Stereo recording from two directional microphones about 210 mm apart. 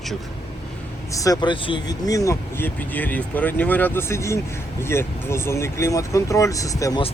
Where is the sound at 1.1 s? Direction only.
15° left (ahead or behind).